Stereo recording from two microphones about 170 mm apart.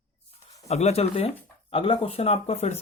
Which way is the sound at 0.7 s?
40° left (ahead or behind).